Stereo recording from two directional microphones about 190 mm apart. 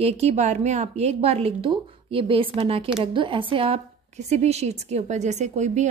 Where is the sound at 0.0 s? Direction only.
35° right (ahead or behind).